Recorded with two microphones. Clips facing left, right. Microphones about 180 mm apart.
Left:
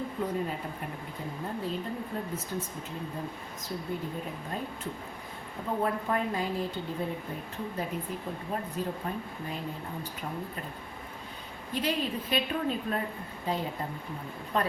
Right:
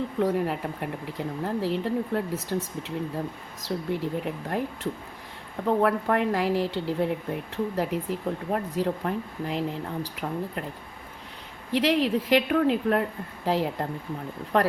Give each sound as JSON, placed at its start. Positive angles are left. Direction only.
{"t": 0.2, "sound": "speech", "side_deg": -80}
{"t": 3.8, "sound": "speech", "side_deg": -80}
{"t": 7.5, "sound": "speech", "side_deg": -80}
{"t": 11.7, "sound": "speech", "side_deg": -85}